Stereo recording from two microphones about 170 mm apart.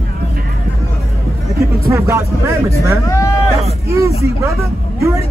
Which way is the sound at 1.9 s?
15° right (ahead or behind).